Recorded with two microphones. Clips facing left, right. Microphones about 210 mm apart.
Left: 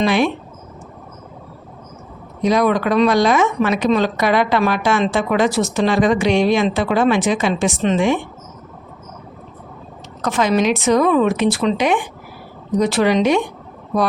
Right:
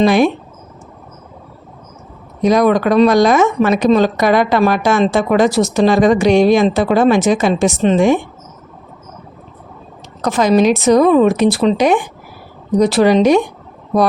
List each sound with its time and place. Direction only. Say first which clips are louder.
0.0 s speech: right 5 dB; 40° right (ahead or behind)
2.4 s speech: right 4 dB; 45° right (ahead or behind)
10.2 s speech: right 5 dB; 35° right (ahead or behind)